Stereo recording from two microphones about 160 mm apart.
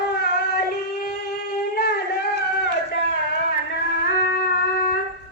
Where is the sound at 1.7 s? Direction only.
70° left (ahead or behind).